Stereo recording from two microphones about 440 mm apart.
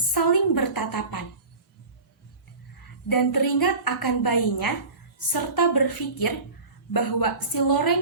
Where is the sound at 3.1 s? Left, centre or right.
Left.